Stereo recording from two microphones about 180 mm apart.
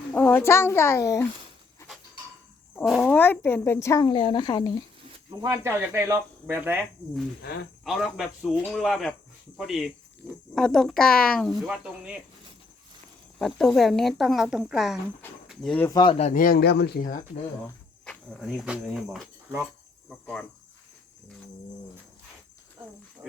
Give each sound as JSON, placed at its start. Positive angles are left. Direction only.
{"t": 0.1, "sound": "speech", "side_deg": 10}
{"t": 2.8, "sound": "speech", "side_deg": 0}
{"t": 4.1, "sound": "speech", "side_deg": 25}
{"t": 5.4, "sound": "speech", "side_deg": -15}
{"t": 7.9, "sound": "speech", "side_deg": 0}
{"t": 13.4, "sound": "speech", "side_deg": 0}
{"t": 15.9, "sound": "speech", "side_deg": 25}
{"t": 16.1, "sound": "speech", "side_deg": 45}
{"t": 18.0, "sound": "speech", "side_deg": 5}
{"t": 20.1, "sound": "cricket", "side_deg": 5}